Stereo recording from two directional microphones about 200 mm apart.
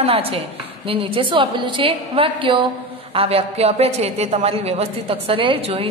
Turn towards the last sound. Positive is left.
turn(degrees=-25)  # may be behind; listen again after turning